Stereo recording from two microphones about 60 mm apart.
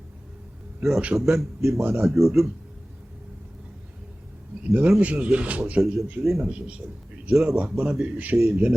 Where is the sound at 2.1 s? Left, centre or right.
Centre.